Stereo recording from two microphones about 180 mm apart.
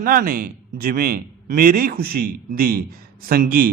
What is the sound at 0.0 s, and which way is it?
A man's voice, 50° right (ahead or behind).